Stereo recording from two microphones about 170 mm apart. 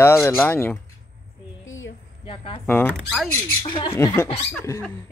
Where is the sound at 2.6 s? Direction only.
10° left (ahead or behind).